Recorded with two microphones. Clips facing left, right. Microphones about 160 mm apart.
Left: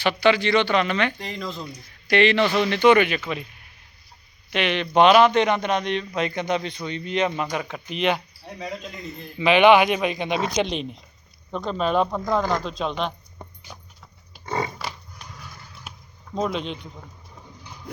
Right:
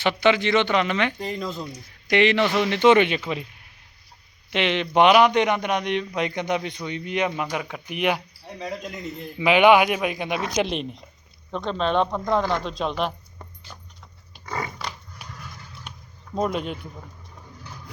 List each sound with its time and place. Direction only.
0.0 s speech: 20° right (ahead or behind)
1.2 s speech: 5° right (ahead or behind)
2.0 s a man's voice: 20° right (ahead or behind)
4.5 s a man's voice: 20° right (ahead or behind)
9.4 s a man's voice: 15° right (ahead or behind)
13.7 s clip-clop: 15° left (ahead or behind)
14.4 s a sound: 25° left (ahead or behind)
15.2 s clip-clop: 10° right (ahead or behind)
15.9 s a sound: 5° left (ahead or behind)
16.3 s speech: 5° right (ahead or behind)